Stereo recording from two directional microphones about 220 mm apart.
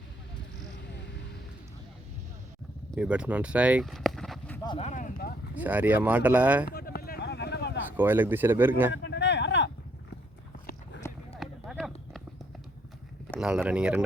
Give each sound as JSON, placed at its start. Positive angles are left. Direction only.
{"t": 2.9, "sound": "speech", "side_deg": -5}
{"t": 4.6, "sound": "speech", "side_deg": 20}
{"t": 4.9, "sound": "speech", "side_deg": 35}
{"t": 5.5, "sound": "speech", "side_deg": -5}
{"t": 6.7, "sound": "a sound", "side_deg": 45}
{"t": 7.9, "sound": "speech", "side_deg": -10}
{"t": 8.9, "sound": "a sound", "side_deg": 50}
{"t": 11.3, "sound": "a sound", "side_deg": 0}
{"t": 13.4, "sound": "speech", "side_deg": -5}